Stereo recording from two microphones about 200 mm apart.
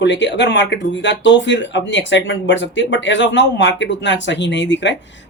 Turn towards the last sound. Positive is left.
turn(degrees=60)  # may be behind; listen again after turning